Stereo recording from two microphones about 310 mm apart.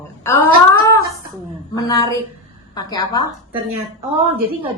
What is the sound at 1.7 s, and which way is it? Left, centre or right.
A woman's voice, centre.